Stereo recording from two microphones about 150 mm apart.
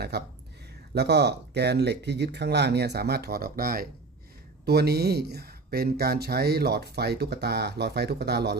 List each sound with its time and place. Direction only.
0.1 s speech: 90° right
4.6 s speech: 90° right